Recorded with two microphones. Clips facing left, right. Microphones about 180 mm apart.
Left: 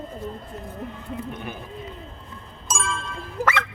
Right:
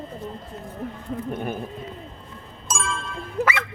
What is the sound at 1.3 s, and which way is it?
Speech, 45° right (ahead or behind).